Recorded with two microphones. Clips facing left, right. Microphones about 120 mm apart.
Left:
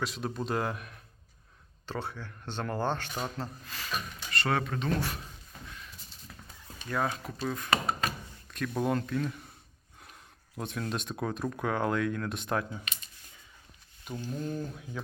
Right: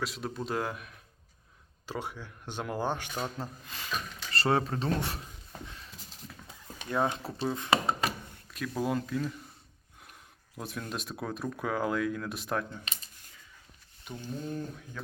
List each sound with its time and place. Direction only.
0.0 s speech: centre (ahead or behind)
1.9 s speech: 15° right (ahead or behind)
4.3 s speech: 30° right (ahead or behind)
6.8 s speech: 20° right (ahead or behind)
8.4 s speech: 5° right (ahead or behind)
14.3 s speech: centre (ahead or behind)
15.0 s speech: 15° left (ahead or behind)